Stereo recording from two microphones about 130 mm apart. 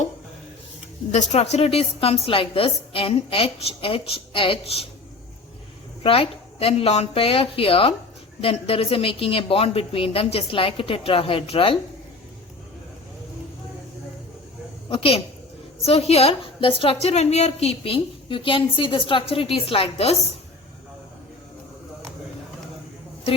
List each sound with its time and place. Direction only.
1.1 s a woman's voice: 60° left (ahead or behind)
6.0 s a woman's voice: 45° left (ahead or behind)
14.8 s a woman's voice: 45° left (ahead or behind)